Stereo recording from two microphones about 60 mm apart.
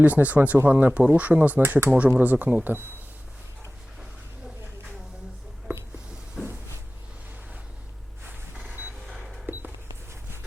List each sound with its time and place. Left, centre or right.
0.0 s speech: right
2.0 s speech: right
6.4 s cupboard open or close: centre
8.6 s a sound: right
9.0 s cash register: centre